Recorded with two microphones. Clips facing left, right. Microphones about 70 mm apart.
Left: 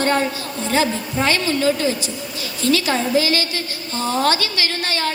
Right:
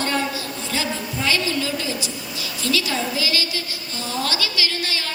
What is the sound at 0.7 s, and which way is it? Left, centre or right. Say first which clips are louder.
A woman's voice: left 7 dB; left.